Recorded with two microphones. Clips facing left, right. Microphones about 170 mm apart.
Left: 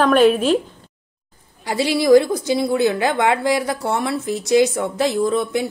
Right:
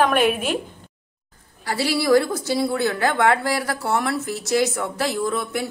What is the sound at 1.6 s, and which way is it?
A woman's voice, 15° left (ahead or behind).